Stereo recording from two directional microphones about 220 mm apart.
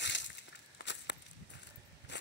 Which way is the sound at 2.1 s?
55° left (ahead or behind).